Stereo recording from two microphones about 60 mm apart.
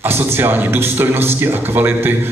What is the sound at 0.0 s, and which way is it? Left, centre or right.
A man's voice, right.